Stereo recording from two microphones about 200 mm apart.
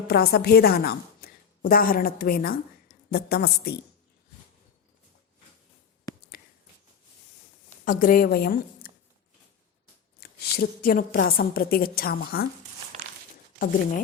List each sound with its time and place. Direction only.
0.1 s a woman's voice: 50° left (ahead or behind)
6.1 s a sound: 20° left (ahead or behind)
7.9 s a woman's voice: 45° left (ahead or behind)
10.2 s a woman's voice: 50° left (ahead or behind)
13.6 s speech: 40° left (ahead or behind)